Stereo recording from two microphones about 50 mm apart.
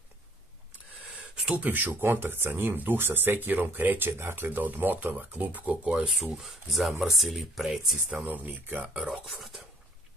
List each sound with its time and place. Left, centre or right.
1.6 s speech: right
2.0 s speech: right
5.9 s speech: centre
8.3 s speech: right
8.8 s speech: centre